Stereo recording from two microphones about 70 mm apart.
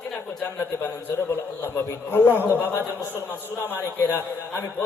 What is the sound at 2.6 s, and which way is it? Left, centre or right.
A man's voice, left.